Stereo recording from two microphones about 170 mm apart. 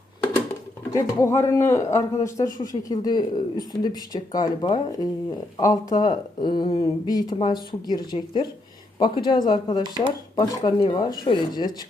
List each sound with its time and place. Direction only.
0.9 s speech: 15° left (ahead or behind)